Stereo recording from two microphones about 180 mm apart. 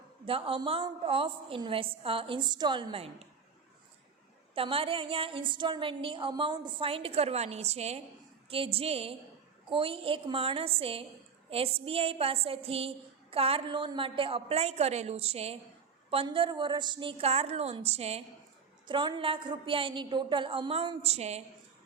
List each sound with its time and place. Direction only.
0.3 s a woman's voice: 30° right (ahead or behind)
4.5 s a woman's voice: 30° right (ahead or behind)